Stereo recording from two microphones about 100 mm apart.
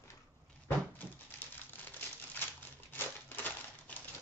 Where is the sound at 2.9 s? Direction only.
20° left (ahead or behind).